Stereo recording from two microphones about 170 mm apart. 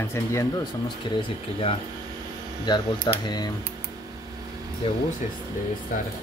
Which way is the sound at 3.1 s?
25° left (ahead or behind).